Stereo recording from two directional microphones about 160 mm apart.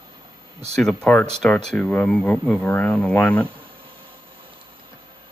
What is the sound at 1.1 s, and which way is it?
Speech, 5° left (ahead or behind).